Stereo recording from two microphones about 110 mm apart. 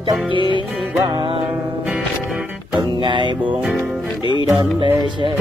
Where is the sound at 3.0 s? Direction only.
45° right (ahead or behind).